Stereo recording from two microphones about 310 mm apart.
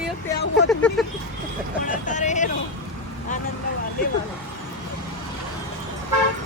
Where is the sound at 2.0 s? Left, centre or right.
Left.